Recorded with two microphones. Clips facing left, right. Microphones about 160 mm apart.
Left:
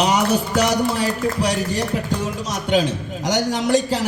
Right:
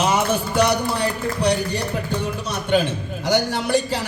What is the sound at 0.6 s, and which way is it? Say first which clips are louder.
Speech: left 1 dB; 90° left.